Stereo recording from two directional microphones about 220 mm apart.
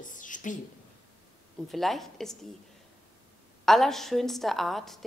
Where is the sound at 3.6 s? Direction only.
Centre (ahead or behind).